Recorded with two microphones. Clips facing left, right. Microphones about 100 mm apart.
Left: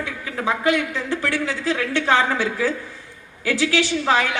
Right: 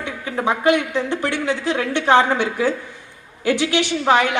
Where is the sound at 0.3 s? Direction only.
25° right (ahead or behind).